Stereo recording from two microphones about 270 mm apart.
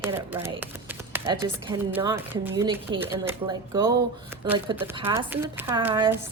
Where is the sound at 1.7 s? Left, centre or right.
Centre.